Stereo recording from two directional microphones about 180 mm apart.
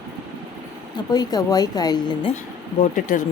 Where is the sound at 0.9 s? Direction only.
20° left (ahead or behind).